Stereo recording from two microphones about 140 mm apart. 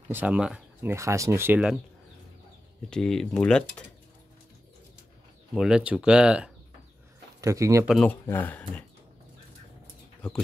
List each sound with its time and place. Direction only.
0.1 s speech: 10° right (ahead or behind)
0.9 s speech: 20° right (ahead or behind)
2.9 s speech: 5° left (ahead or behind)
5.5 s speech: 5° right (ahead or behind)
7.3 s speech: 20° right (ahead or behind)
7.8 s speech: centre (ahead or behind)
8.1 s speech: 15° left (ahead or behind)